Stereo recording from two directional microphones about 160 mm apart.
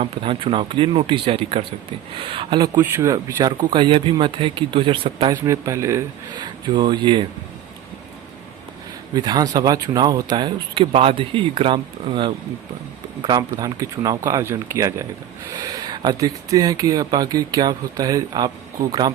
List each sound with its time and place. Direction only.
0.0 s speech: 35° right (ahead or behind)
2.8 s speech: 15° right (ahead or behind); by 5.4 s 30° right (ahead or behind)
5.5 s speech: 20° right (ahead or behind)
9.1 s speech: 25° right (ahead or behind)